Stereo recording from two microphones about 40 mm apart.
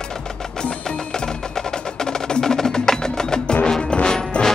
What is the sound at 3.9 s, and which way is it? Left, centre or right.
Music, left.